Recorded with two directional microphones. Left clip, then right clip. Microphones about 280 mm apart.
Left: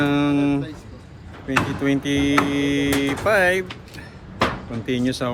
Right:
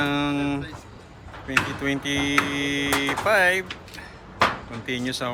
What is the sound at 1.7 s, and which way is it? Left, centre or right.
Speech, centre.